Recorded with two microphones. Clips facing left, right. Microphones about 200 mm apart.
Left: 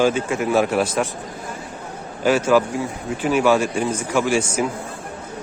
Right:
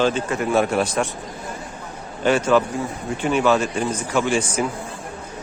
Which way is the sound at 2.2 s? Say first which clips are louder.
Left 1 dB; 5° left (ahead or behind).